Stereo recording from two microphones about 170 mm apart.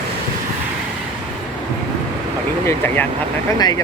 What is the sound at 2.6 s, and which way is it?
Speech, 10° left (ahead or behind).